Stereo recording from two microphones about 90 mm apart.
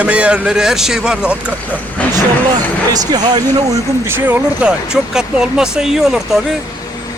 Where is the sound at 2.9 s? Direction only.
45° right (ahead or behind).